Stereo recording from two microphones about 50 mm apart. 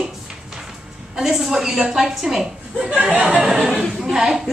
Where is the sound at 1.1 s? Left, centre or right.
Centre.